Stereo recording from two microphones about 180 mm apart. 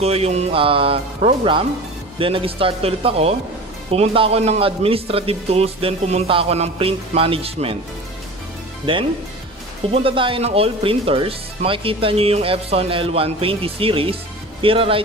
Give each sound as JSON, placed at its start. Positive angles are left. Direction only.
{"t": 0.0, "sound": "speech", "side_deg": -35}
{"t": 8.9, "sound": "speech", "side_deg": -30}